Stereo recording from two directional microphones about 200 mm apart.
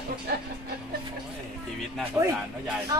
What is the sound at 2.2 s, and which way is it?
Speech, 15° right (ahead or behind).